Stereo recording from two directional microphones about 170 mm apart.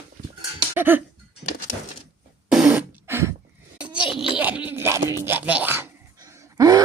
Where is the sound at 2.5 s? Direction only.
5° right (ahead or behind).